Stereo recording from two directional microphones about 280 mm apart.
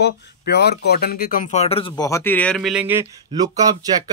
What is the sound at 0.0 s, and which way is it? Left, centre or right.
Speech, left.